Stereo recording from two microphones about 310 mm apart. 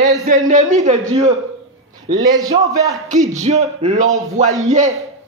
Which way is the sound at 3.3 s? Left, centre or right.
Right.